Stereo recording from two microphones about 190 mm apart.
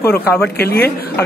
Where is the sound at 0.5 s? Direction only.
55° left (ahead or behind).